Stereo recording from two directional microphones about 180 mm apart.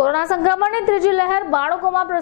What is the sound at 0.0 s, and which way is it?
A woman's voice, 25° left (ahead or behind).